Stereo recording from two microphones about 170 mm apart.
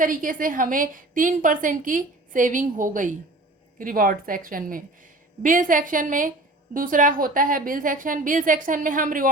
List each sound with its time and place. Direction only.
0.0 s a woman's voice: 50° right (ahead or behind)